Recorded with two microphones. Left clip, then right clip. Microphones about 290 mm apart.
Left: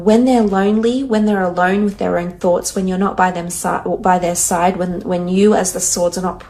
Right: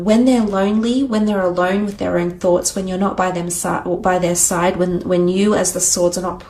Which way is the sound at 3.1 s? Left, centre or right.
Right.